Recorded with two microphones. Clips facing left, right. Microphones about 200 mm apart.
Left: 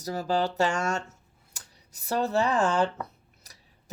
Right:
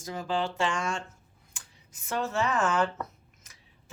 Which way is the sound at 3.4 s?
35° left (ahead or behind).